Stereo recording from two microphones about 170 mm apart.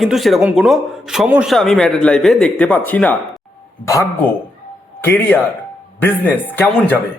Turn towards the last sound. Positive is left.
turn(degrees=10)  # may be behind; listen again after turning